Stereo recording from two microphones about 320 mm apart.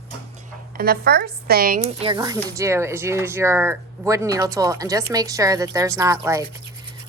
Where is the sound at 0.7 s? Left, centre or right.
Right.